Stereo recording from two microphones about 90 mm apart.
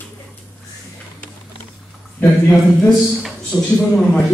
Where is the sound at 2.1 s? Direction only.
15° left (ahead or behind).